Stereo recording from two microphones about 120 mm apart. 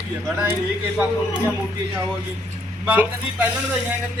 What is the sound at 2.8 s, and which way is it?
Speech, 15° right (ahead or behind).